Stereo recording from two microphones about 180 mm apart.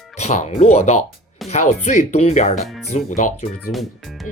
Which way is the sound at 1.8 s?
40° left (ahead or behind).